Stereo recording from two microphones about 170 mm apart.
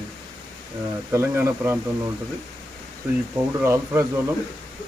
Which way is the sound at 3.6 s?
15° right (ahead or behind).